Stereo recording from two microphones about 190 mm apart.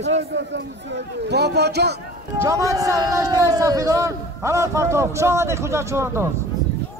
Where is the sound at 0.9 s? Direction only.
60° right (ahead or behind).